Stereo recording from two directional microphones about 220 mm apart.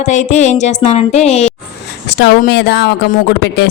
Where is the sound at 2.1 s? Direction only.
50° left (ahead or behind).